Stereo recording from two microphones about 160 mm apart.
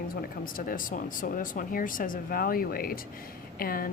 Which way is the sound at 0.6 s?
60° left (ahead or behind).